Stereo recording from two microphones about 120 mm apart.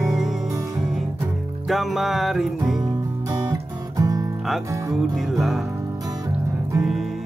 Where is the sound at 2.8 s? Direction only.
30° right (ahead or behind).